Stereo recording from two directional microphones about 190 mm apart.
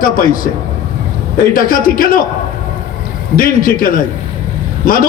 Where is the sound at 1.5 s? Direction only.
50° left (ahead or behind).